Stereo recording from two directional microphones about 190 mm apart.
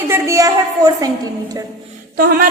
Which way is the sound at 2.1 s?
50° right (ahead or behind).